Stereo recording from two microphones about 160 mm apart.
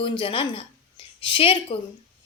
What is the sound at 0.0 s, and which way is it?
A woman's voice, 35° left (ahead or behind).